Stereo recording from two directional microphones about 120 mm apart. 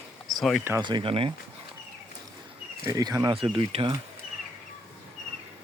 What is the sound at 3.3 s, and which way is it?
Speech, 45° right (ahead or behind).